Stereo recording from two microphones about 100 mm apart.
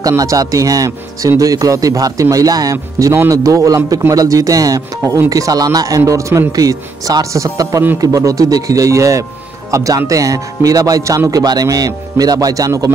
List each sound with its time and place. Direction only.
0.2 s speech: 35° right (ahead or behind)